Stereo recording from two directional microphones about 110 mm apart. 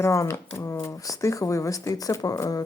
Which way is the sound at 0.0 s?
25° left (ahead or behind).